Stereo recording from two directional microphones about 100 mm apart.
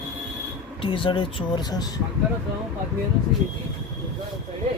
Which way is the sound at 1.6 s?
40° left (ahead or behind).